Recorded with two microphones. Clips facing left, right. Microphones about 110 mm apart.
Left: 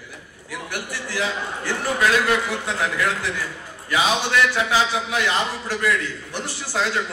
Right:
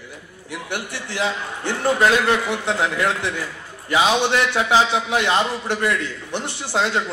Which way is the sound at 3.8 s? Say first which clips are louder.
Right 4 dB; 25° right (ahead or behind).